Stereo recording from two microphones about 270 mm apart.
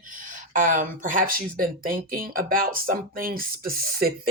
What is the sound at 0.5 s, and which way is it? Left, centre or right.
Speech, right.